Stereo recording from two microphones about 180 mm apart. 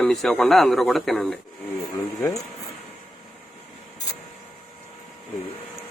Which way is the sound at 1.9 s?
15° left (ahead or behind).